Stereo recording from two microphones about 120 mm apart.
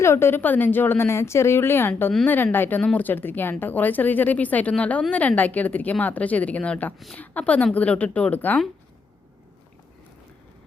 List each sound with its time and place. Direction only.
0.0 s a woman's voice: 20° left (ahead or behind)